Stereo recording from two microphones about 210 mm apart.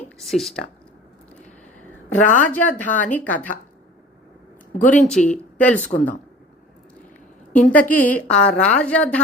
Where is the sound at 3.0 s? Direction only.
5° left (ahead or behind).